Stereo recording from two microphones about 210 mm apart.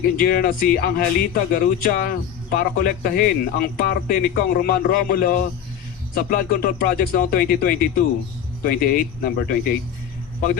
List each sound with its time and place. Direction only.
0.0 s speech: 45° left (ahead or behind)